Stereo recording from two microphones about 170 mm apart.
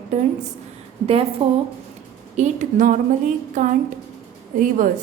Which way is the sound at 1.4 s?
35° right (ahead or behind).